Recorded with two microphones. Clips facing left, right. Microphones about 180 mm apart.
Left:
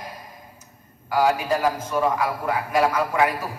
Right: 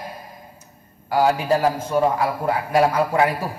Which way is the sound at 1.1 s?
30° right (ahead or behind).